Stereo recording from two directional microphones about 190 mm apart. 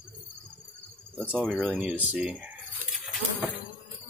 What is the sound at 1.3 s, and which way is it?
Speech, 5° right (ahead or behind).